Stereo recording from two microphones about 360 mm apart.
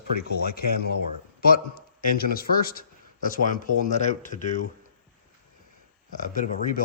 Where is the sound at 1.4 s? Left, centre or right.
Left.